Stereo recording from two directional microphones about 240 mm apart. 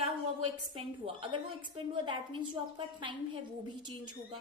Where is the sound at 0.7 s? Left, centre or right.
Right.